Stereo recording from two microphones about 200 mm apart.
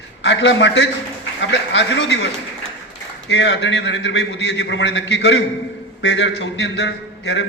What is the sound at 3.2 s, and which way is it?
A man's voice, 60° left (ahead or behind).